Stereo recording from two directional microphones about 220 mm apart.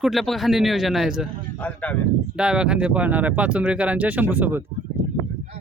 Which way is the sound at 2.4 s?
5° right (ahead or behind).